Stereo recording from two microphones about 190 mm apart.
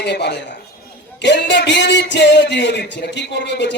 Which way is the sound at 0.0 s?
65° left (ahead or behind).